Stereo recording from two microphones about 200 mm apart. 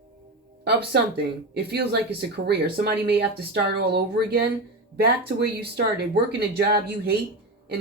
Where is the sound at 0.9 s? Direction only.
55° right (ahead or behind).